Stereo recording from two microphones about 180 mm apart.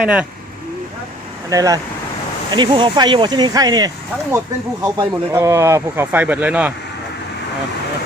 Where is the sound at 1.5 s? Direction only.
20° right (ahead or behind).